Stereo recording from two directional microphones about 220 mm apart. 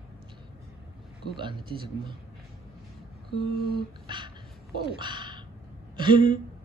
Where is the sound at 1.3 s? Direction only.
20° right (ahead or behind).